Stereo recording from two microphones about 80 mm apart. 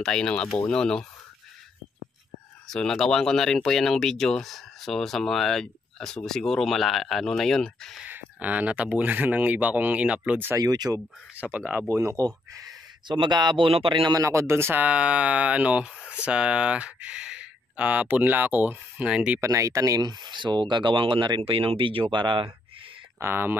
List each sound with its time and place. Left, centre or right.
0.0 s speech: centre
2.7 s speech: centre
8.0 s speech: centre
10.6 s speech: right
11.3 s speech: centre
11.9 s speech: right
13.1 s speech: right
14.1 s speech: right
14.8 s speech: centre
19.4 s speech: right
23.1 s speech: right